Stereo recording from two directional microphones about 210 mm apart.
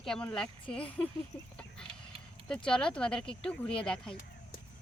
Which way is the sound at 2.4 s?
5° left (ahead or behind).